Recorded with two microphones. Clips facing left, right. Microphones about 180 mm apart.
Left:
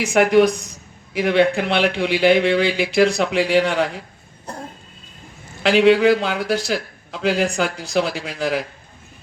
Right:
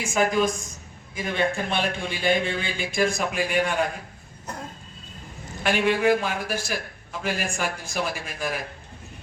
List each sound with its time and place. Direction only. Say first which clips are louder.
0.0 s speech: left 8 dB; 75° left (ahead or behind)
5.6 s speech: left 8 dB; 75° left (ahead or behind)